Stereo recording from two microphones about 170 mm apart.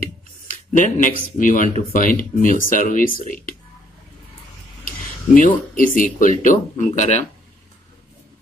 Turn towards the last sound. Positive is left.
turn(degrees=45)  # may be behind; listen again after turning